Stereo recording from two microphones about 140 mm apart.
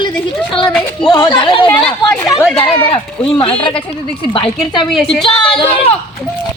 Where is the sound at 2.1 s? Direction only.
5° left (ahead or behind).